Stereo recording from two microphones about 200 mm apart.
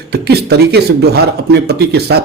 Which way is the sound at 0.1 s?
55° right (ahead or behind).